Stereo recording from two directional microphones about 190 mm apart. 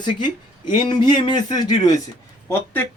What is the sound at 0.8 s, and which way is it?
Speech, 25° left (ahead or behind).